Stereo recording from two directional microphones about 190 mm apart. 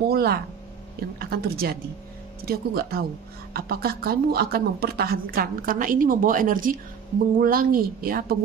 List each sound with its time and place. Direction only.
0.1 s speech: 55° right (ahead or behind)